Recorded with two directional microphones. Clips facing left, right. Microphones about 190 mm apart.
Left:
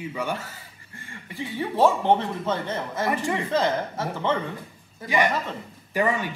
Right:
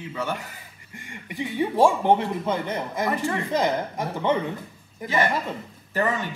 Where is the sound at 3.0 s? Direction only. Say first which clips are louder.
Left 1 dB; 15° left (ahead or behind).